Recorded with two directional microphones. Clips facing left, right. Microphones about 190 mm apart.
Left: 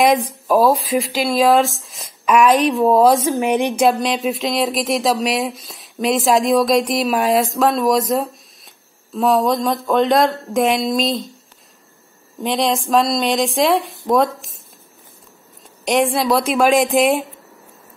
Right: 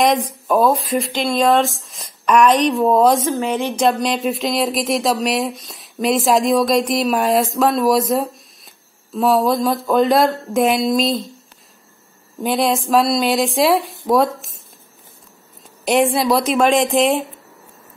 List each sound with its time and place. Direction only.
0.0 s speech: centre (ahead or behind)
3.3 s a woman's voice: 15° left (ahead or behind)
3.8 s speech: centre (ahead or behind)
12.4 s speech: centre (ahead or behind)
15.8 s speech: centre (ahead or behind)